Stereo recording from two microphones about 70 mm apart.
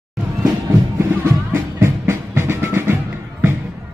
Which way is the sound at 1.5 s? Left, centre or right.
Right.